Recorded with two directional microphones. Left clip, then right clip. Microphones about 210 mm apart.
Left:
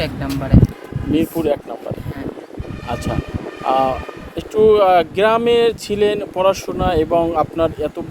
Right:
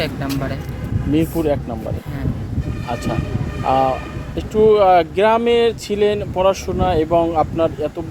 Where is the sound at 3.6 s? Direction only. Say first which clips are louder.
Even; 15° left (ahead or behind).